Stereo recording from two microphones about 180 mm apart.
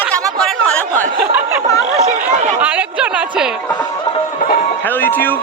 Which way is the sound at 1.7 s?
35° right (ahead or behind).